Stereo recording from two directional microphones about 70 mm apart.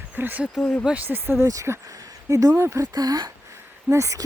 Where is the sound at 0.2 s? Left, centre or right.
Right.